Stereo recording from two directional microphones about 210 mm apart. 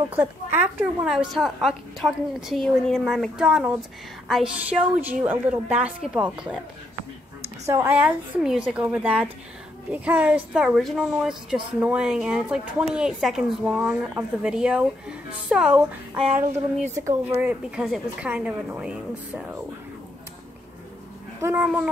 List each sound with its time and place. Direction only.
0.1 s a woman's voice: 10° right (ahead or behind)
7.6 s a woman's voice: 15° right (ahead or behind)
21.4 s speech: 10° right (ahead or behind)